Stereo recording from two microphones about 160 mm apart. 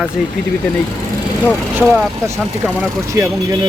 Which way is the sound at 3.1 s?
20° right (ahead or behind).